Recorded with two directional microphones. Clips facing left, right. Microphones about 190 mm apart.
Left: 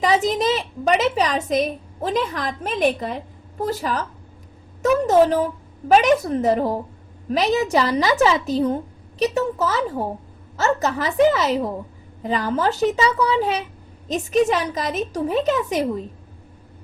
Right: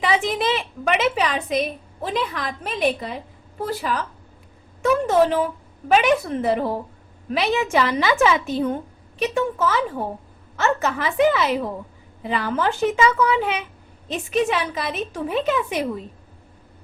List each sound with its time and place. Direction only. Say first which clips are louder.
0.0 s a woman's voice: left 3 dB; 40° left (ahead or behind)